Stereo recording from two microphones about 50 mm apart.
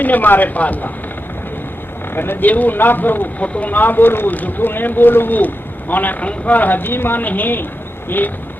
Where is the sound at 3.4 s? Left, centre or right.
Left.